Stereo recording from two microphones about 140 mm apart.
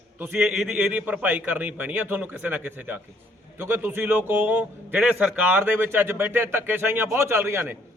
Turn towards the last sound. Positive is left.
turn(degrees=-15)  # may be behind; listen again after turning